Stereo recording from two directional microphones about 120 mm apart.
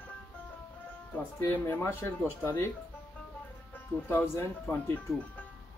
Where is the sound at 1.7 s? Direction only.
20° left (ahead or behind).